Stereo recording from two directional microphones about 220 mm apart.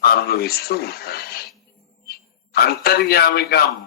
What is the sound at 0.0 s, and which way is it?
A man's voice, 45° left (ahead or behind).